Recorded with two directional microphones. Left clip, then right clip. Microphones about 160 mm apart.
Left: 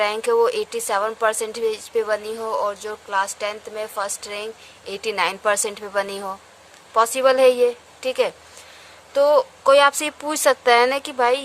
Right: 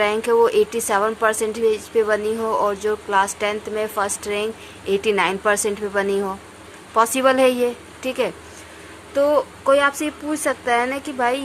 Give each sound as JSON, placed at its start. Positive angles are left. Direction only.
{"t": 0.0, "sound": "a woman's voice", "side_deg": 45}